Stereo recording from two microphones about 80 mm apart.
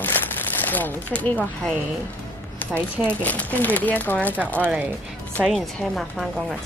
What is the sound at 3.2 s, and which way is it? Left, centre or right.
Speech, centre.